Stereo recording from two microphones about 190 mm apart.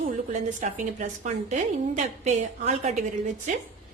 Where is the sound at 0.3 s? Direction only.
40° right (ahead or behind).